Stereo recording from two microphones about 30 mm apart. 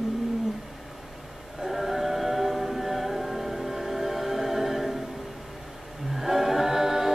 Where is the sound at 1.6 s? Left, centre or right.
Centre.